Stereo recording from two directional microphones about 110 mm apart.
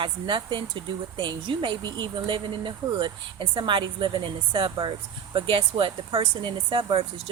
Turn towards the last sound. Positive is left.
turn(degrees=-50)  # may be behind; listen again after turning